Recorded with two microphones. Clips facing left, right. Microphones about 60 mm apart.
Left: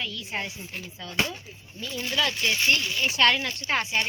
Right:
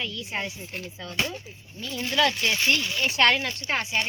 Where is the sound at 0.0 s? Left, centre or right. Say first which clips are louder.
Right 1 dB; centre.